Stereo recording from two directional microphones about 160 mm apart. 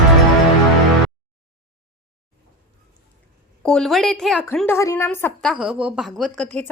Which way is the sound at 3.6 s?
5° left (ahead or behind).